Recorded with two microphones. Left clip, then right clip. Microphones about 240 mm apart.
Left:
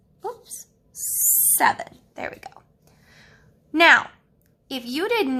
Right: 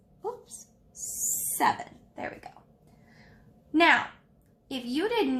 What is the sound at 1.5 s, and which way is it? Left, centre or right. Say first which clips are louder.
Speech: left 5 dB; left.